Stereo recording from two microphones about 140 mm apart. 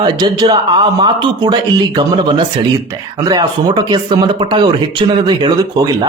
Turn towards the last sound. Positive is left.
turn(degrees=-35)  # may be behind; listen again after turning